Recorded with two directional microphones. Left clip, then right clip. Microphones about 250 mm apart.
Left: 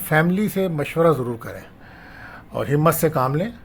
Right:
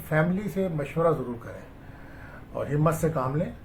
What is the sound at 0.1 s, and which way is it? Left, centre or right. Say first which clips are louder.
Speech: left 7 dB; left.